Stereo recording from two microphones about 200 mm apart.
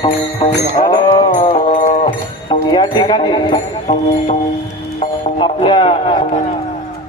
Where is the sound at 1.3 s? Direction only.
40° left (ahead or behind).